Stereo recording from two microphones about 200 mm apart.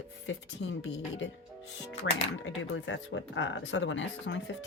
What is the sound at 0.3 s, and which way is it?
Speech, 65° left (ahead or behind).